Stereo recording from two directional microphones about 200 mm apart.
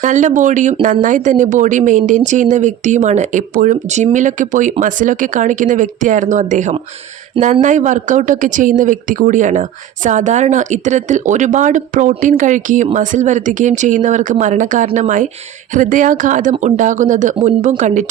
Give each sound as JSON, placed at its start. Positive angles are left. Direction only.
{"t": 0.0, "sound": "a woman's voice", "side_deg": -40}